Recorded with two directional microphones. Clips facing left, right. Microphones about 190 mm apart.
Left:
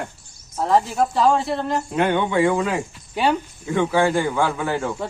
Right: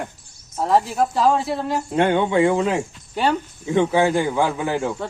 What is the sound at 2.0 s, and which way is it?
Speech, 30° right (ahead or behind).